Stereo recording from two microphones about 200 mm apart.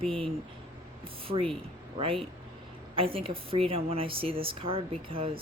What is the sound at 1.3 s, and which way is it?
Speech, 25° right (ahead or behind).